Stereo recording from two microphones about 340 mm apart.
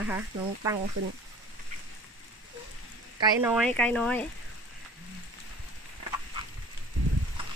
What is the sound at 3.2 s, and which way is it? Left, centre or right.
Speech, centre.